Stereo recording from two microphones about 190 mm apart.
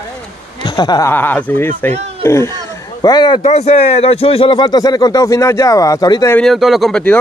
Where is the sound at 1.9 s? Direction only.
35° right (ahead or behind).